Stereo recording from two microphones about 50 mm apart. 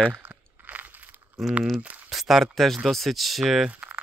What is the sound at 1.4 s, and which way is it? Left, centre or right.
Speech, centre.